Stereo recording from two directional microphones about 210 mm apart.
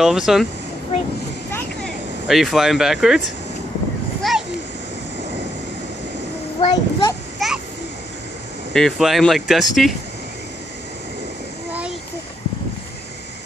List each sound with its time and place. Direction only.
0.0 s speech: centre (ahead or behind)
2.2 s speech: centre (ahead or behind)
4.2 s a sound: centre (ahead or behind)
6.6 s a child's voice: 25° left (ahead or behind)
7.3 s a sound: centre (ahead or behind)
8.7 s speech: centre (ahead or behind)